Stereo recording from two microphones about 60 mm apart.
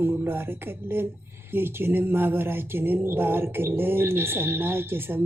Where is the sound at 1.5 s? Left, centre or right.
Right.